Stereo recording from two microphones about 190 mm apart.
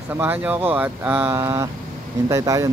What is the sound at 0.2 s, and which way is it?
Speech, 10° right (ahead or behind).